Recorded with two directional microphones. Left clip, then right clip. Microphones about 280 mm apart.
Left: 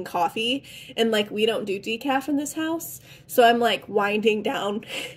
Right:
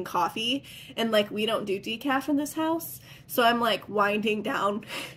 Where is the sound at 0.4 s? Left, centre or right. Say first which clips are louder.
Left 3 dB; centre.